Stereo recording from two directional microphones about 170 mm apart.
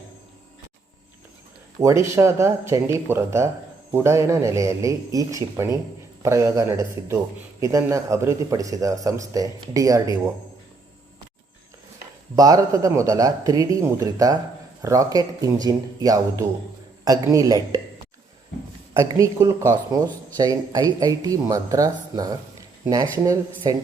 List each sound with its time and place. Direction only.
1.8 s a man's voice: 15° right (ahead or behind)
12.4 s a man's voice: 20° right (ahead or behind)
18.9 s a man's voice: 20° right (ahead or behind)
23.6 s a man's voice: 20° right (ahead or behind)